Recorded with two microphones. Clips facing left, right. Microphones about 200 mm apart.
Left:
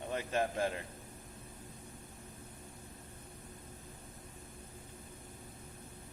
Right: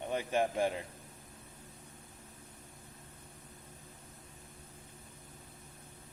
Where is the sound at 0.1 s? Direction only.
15° right (ahead or behind).